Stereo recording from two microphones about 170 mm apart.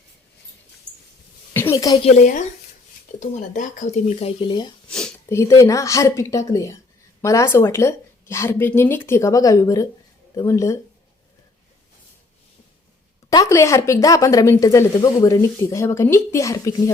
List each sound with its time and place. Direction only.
1.5 s a sound: 15° left (ahead or behind)
2.0 s speech: 45° left (ahead or behind); by 4.7 s 25° left (ahead or behind)
4.9 s sniff: 5° left (ahead or behind)
5.3 s a woman's voice: 20° left (ahead or behind)
13.3 s a woman's voice: 20° left (ahead or behind)